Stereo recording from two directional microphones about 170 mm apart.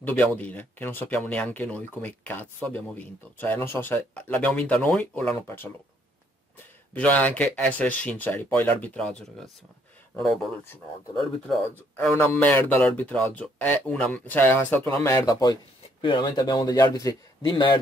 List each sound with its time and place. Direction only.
0.0 s speech: 10° left (ahead or behind)
6.9 s speech: 10° left (ahead or behind)
12.2 s speech: 15° left (ahead or behind)